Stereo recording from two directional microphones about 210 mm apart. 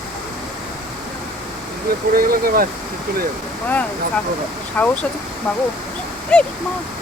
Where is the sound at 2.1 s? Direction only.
45° right (ahead or behind).